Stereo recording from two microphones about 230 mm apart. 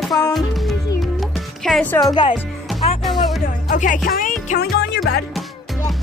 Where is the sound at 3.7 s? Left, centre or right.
Left.